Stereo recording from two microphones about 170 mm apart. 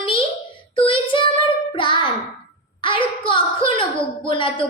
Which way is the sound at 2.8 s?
30° left (ahead or behind).